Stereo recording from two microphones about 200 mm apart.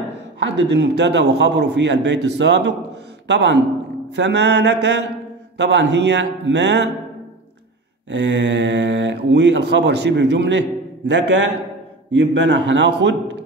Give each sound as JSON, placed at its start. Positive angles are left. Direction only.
{"t": 0.4, "sound": "speech", "side_deg": -60}
{"t": 8.1, "sound": "speech", "side_deg": -60}